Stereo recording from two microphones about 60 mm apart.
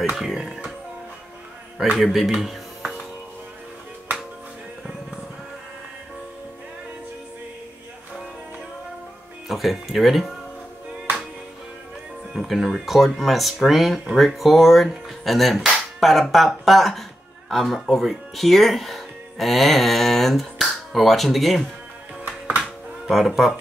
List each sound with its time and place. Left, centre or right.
0.1 s speech: centre
2.0 s speech: centre
9.5 s speech: centre
12.4 s speech: centre
22.6 s music: centre